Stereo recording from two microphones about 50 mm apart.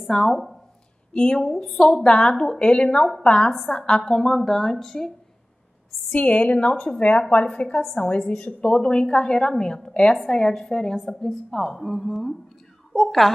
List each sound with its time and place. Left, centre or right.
0.0 s speech: centre
1.1 s speech: centre
1.4 s speech: centre
1.9 s a woman's voice: centre
6.1 s a woman's voice: left; by 13.3 s centre